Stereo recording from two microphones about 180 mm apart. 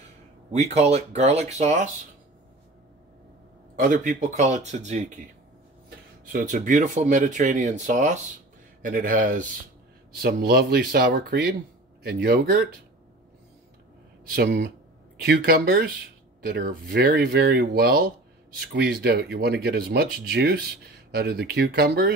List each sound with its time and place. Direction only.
0.5 s speech: 35° right (ahead or behind)
3.7 s speech: 50° right (ahead or behind)
6.3 s speech: 45° right (ahead or behind)
10.1 s speech: 60° right (ahead or behind)
14.3 s speech: 65° right (ahead or behind)